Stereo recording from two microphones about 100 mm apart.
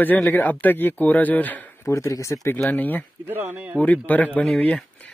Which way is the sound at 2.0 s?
30° left (ahead or behind).